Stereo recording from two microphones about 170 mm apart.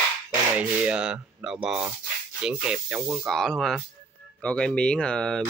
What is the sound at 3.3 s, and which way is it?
Speech, centre (ahead or behind).